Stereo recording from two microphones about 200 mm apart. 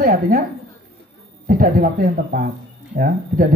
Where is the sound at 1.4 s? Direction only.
45° right (ahead or behind).